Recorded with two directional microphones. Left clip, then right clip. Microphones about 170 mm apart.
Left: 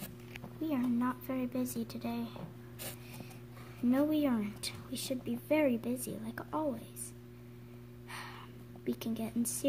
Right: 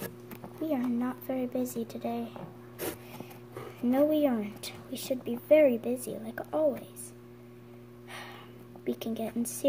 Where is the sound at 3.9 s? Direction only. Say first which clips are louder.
Right 6 dB; 35° left (ahead or behind).